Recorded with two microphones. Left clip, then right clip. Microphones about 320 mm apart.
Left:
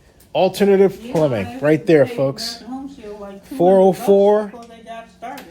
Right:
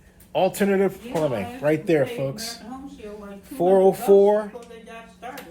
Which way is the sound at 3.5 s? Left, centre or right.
Left.